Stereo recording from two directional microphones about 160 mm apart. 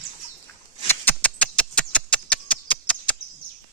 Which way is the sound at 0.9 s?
10° left (ahead or behind).